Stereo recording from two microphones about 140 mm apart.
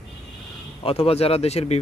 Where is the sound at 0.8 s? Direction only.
45° left (ahead or behind).